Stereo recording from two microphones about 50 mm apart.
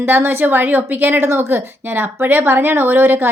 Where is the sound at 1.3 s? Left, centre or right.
Right.